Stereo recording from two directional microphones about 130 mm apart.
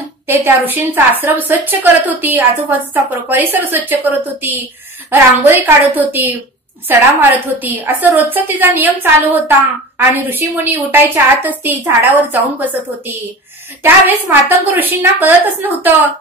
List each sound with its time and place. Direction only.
0.3 s a woman's voice: 15° right (ahead or behind)